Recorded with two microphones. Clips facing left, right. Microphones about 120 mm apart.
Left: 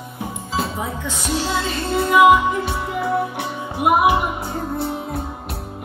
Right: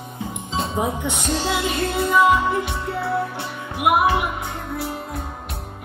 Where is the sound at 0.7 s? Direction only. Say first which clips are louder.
Right 3 dB; 20° right (ahead or behind).